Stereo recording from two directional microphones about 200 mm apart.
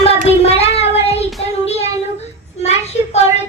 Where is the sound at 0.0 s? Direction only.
30° left (ahead or behind).